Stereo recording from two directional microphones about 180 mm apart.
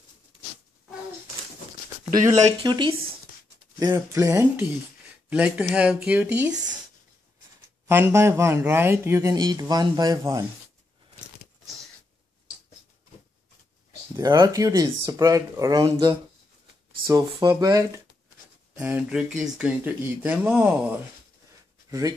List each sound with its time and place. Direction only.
2.1 s speech: 20° right (ahead or behind)
7.9 s speech: 15° right (ahead or behind)
14.1 s speech: 20° right (ahead or behind)
18.8 s speech: 5° right (ahead or behind)